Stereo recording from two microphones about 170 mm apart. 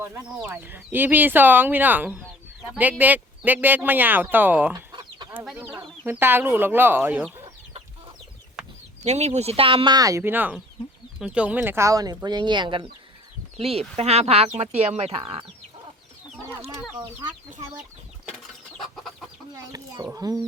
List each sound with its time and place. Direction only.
0.3 s speech: 10° right (ahead or behind)
4.9 s chicken: 25° right (ahead or behind)
5.5 s speech: 10° right (ahead or behind)
8.6 s chicken: 5° right (ahead or behind)
9.0 s speech: 40° right (ahead or behind)
18.8 s chicken: centre (ahead or behind)
20.1 s speech: 20° right (ahead or behind)